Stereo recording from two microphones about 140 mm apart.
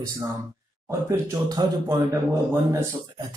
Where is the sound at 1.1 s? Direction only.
25° right (ahead or behind).